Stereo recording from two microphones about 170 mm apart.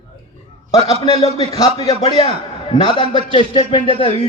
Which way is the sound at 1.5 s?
20° left (ahead or behind).